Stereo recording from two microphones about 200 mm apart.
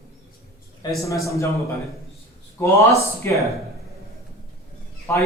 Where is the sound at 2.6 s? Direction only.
15° left (ahead or behind).